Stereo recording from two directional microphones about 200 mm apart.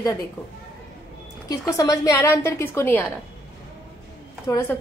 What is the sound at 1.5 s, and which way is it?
A woman's voice, 15° left (ahead or behind).